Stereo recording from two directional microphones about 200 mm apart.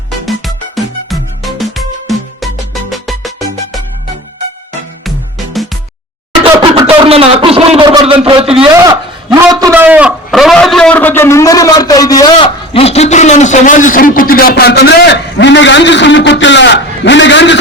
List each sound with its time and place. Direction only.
0.3 s music: centre (ahead or behind)
6.4 s chuckle: 25° right (ahead or behind)
9.3 s a sound: 20° right (ahead or behind); by 17.6 s 60° left (ahead or behind)